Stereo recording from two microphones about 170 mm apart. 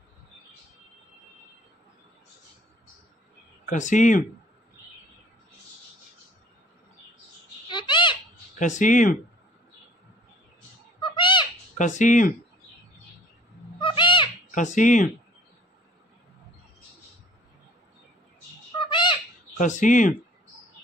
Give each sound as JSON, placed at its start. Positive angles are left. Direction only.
{"t": 3.6, "sound": "speech", "side_deg": 45}
{"t": 7.6, "sound": "a sound", "side_deg": 30}
{"t": 8.5, "sound": "speech", "side_deg": 45}
{"t": 11.0, "sound": "a sound", "side_deg": 30}
{"t": 11.8, "sound": "speech", "side_deg": 50}
{"t": 13.7, "sound": "owl", "side_deg": 30}
{"t": 14.5, "sound": "speech", "side_deg": 50}
{"t": 18.8, "sound": "owl", "side_deg": 30}
{"t": 19.5, "sound": "speech", "side_deg": 45}